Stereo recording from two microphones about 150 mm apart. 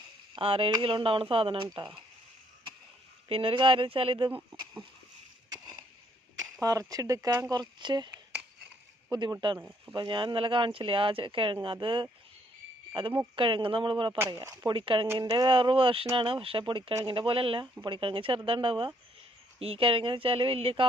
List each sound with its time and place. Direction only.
0.3 s speech: 35° right (ahead or behind)
3.2 s speech: 35° right (ahead or behind)
6.4 s speech: 25° right (ahead or behind)
9.6 s speech: 10° right (ahead or behind)
9.9 s speech: 30° right (ahead or behind)
14.2 s speech: 20° right (ahead or behind); by 15.0 s 35° right (ahead or behind)
15.0 s speech: 20° right (ahead or behind); by 20.8 s 40° right (ahead or behind)